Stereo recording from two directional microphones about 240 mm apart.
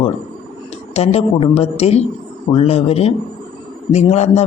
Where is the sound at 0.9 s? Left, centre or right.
Left.